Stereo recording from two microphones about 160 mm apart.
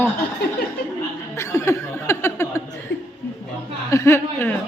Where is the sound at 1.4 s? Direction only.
20° left (ahead or behind).